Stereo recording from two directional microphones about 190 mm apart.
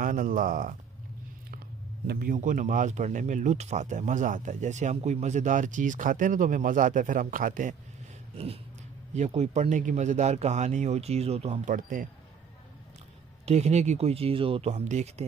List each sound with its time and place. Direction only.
0.0 s speech: 45° right (ahead or behind)
2.0 s speech: 50° right (ahead or behind)
9.1 s speech: 35° right (ahead or behind)
13.5 s speech: 35° right (ahead or behind)